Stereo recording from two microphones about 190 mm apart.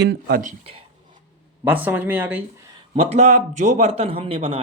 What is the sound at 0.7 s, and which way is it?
Speech, 30° right (ahead or behind).